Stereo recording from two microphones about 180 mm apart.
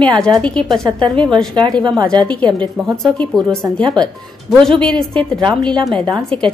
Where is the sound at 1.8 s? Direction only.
25° right (ahead or behind).